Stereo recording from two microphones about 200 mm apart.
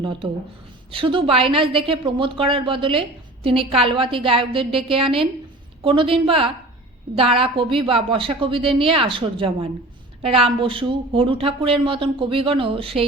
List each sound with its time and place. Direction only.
0.0 s a woman's voice: 25° right (ahead or behind)